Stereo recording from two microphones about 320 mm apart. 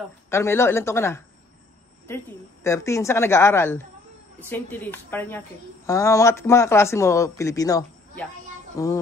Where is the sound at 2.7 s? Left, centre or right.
Centre.